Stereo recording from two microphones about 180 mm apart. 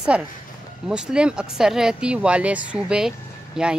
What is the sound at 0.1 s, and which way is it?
Speech, 5° right (ahead or behind).